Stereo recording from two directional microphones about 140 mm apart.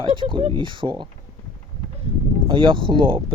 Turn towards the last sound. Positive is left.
turn(degrees=-35)  # may be behind; listen again after turning